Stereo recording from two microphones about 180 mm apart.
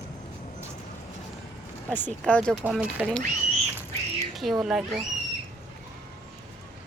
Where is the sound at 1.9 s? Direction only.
10° left (ahead or behind).